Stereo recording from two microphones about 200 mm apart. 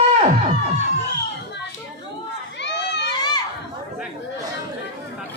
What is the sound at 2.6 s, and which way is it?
Run, 60° left (ahead or behind).